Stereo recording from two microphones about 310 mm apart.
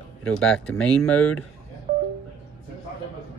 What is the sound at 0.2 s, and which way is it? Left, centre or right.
Speech, centre.